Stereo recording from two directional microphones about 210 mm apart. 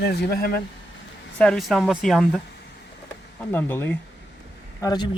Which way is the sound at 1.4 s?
Centre (ahead or behind).